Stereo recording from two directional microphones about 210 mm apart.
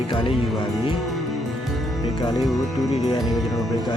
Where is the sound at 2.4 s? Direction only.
Centre (ahead or behind).